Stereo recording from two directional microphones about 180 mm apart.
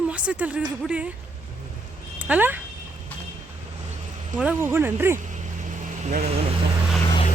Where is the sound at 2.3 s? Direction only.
10° right (ahead or behind).